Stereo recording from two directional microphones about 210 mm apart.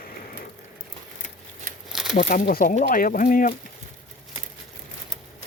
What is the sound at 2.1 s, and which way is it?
Speech, 40° left (ahead or behind).